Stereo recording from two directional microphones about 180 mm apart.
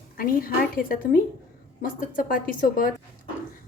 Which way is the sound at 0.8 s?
50° left (ahead or behind).